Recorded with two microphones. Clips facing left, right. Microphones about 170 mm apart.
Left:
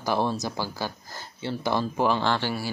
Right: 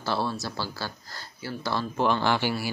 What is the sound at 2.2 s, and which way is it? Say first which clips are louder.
Speech: right 1 dB; 10° right (ahead or behind).